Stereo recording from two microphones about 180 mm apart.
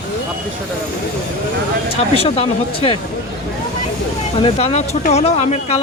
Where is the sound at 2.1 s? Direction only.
35° left (ahead or behind).